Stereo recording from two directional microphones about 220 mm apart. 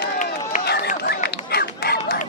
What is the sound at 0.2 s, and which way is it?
Run, 35° left (ahead or behind).